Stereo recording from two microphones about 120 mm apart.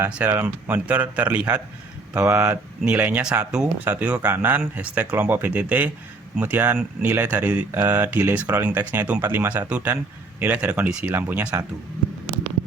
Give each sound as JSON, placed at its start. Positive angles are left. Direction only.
{"t": 0.1, "sound": "speech", "side_deg": -10}